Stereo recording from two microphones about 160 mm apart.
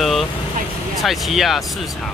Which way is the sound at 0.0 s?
Centre (ahead or behind).